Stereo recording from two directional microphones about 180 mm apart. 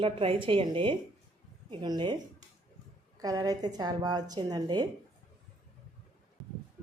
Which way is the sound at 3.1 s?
20° right (ahead or behind).